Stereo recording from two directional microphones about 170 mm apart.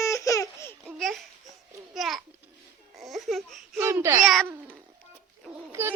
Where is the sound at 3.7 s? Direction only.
15° right (ahead or behind).